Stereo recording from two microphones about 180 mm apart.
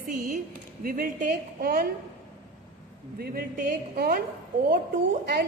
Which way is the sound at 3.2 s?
55° right (ahead or behind).